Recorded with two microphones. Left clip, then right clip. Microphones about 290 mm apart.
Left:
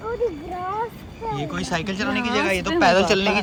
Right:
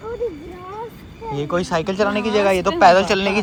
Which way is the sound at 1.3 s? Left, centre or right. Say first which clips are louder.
Right 7 dB; centre.